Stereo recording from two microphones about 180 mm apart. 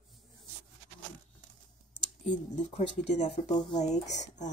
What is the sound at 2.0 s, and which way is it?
Speech, 45° left (ahead or behind).